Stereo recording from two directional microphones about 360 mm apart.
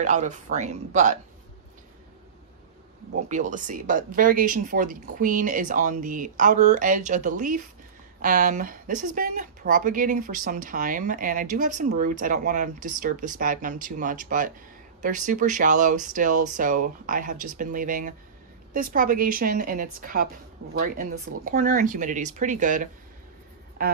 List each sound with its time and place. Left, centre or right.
0.0 s speech: centre
3.3 s speech: right
21.3 s speech: right